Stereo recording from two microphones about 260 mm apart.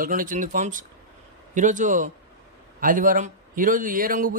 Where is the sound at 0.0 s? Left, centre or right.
Right.